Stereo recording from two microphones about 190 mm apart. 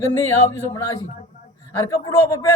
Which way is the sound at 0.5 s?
15° left (ahead or behind).